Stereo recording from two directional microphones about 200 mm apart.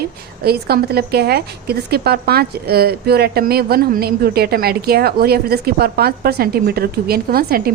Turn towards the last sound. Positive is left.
turn(degrees=-50)  # may be behind; listen again after turning